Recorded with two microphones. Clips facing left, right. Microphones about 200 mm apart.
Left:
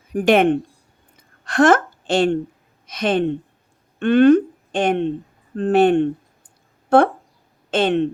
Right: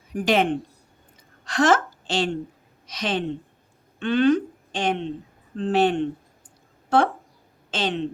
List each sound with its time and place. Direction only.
0.3 s a woman's voice: 60° left (ahead or behind)